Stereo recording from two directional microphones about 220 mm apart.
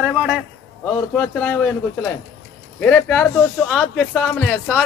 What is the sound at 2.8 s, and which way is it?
Speech, 5° left (ahead or behind).